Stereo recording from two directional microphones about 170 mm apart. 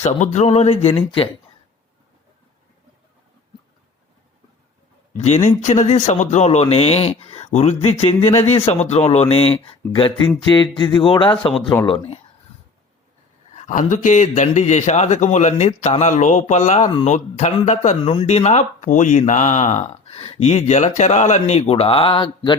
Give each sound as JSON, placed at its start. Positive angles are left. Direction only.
{"t": 0.0, "sound": "speech", "side_deg": 40}
{"t": 5.1, "sound": "speech", "side_deg": 40}
{"t": 13.5, "sound": "a man's voice", "side_deg": 45}